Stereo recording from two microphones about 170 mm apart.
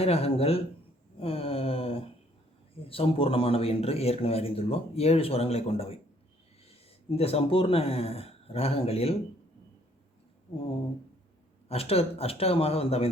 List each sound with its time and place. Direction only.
0.0 s a man's voice: 35° left (ahead or behind)
7.2 s a man's voice: 35° left (ahead or behind)
11.7 s a man's voice: 35° left (ahead or behind)